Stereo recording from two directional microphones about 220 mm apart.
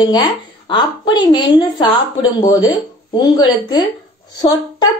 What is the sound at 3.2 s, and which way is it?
Speech, 20° left (ahead or behind).